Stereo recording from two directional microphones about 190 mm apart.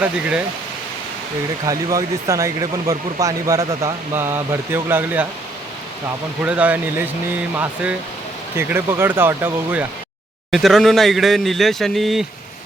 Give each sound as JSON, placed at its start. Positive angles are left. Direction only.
{"t": 0.0, "sound": "a man's voice", "side_deg": -5}
{"t": 1.6, "sound": "speech", "side_deg": -20}
{"t": 6.4, "sound": "speech", "side_deg": -10}
{"t": 10.5, "sound": "a man's voice", "side_deg": 0}